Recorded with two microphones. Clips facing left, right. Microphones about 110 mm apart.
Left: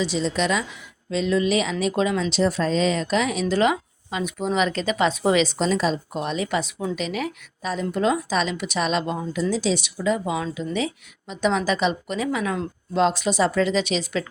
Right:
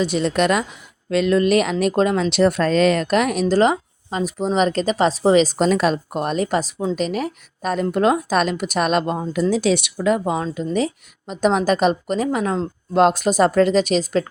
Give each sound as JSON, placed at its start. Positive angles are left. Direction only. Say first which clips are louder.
{"t": 0.0, "sound": "a woman's voice", "louder": "right 5 dB", "side_deg": -60}
{"t": 3.5, "sound": "a woman's voice", "louder": "right 4 dB", "side_deg": -40}
{"t": 10.3, "sound": "a woman's voice", "louder": "right 4 dB", "side_deg": -40}